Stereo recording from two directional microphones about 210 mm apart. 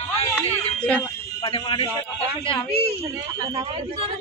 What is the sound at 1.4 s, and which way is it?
Speech, 25° left (ahead or behind).